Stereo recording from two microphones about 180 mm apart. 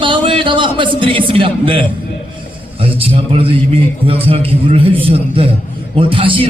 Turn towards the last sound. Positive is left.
turn(degrees=-30)  # may be behind; listen again after turning